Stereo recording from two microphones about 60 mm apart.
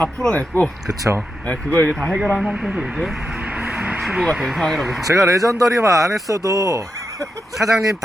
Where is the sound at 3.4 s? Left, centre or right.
Centre.